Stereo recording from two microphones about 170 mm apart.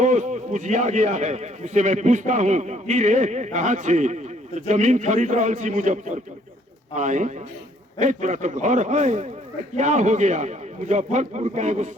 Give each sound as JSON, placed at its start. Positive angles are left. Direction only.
{"t": 0.0, "sound": "a man's voice", "side_deg": -45}